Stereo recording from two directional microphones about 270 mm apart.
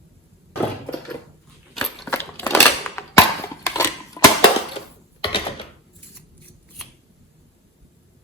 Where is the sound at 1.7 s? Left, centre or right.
Centre.